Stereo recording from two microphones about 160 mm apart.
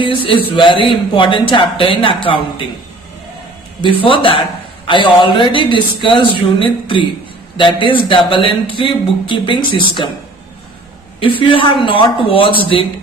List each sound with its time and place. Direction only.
0.0 s speech: 30° left (ahead or behind)
3.8 s speech: 30° left (ahead or behind)
11.2 s speech: 30° left (ahead or behind)